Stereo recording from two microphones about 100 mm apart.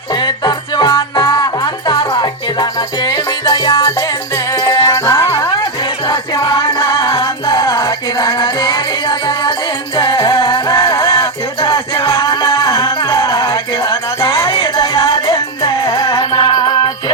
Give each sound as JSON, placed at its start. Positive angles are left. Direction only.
{"t": 0.2, "sound": "music", "side_deg": 45}
{"t": 1.2, "sound": "music", "side_deg": 35}
{"t": 11.1, "sound": "music", "side_deg": 55}